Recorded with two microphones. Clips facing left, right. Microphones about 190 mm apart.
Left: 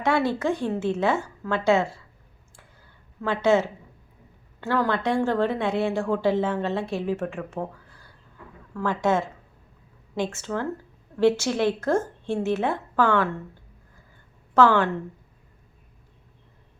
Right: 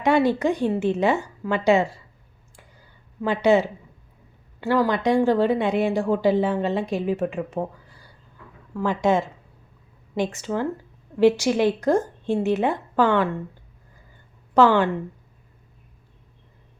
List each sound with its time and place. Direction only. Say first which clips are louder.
0.0 s speech: right 4 dB; 15° right (ahead or behind)
3.2 s speech: right 2 dB; 15° right (ahead or behind)
8.7 s speech: right 2 dB; 15° right (ahead or behind)
14.5 s speech: right 2 dB; 15° right (ahead or behind)